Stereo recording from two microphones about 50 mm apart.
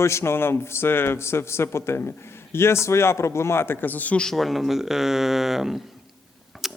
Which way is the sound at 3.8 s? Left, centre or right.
Left.